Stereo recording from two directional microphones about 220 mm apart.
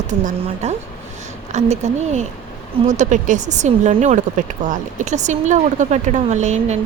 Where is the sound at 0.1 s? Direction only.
30° right (ahead or behind).